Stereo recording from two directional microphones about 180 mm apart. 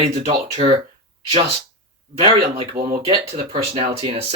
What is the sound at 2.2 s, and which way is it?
Speech, 30° right (ahead or behind).